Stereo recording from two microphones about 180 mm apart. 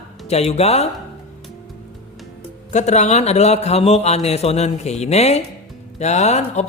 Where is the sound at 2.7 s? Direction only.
40° left (ahead or behind).